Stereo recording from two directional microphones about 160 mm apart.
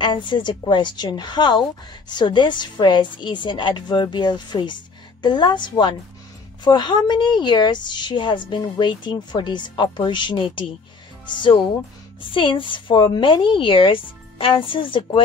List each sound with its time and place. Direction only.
0.0 s a woman's voice: 30° left (ahead or behind)